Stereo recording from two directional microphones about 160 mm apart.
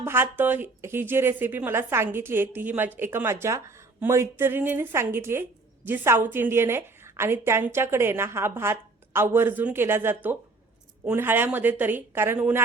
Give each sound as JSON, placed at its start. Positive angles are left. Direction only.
{"t": 0.0, "sound": "speech", "side_deg": -15}